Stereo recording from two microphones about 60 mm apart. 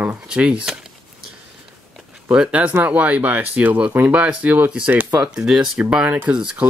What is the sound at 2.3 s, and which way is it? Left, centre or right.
Speech, centre.